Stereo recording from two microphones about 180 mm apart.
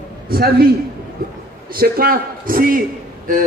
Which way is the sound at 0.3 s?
55° right (ahead or behind).